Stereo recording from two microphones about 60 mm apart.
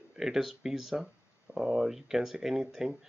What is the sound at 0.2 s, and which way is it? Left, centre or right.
Speech, centre.